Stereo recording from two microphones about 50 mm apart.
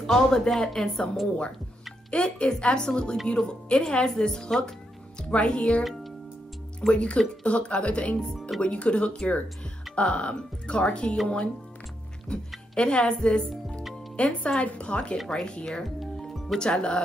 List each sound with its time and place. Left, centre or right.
0.0 s speech: centre
2.0 s speech: left
5.3 s speech: left
6.9 s speech: left
16.0 s music: centre
16.5 s speech: centre